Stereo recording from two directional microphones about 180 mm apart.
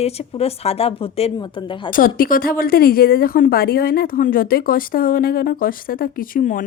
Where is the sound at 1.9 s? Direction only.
50° left (ahead or behind).